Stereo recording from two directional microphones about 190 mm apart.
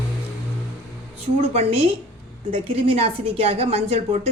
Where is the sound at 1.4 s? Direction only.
30° right (ahead or behind).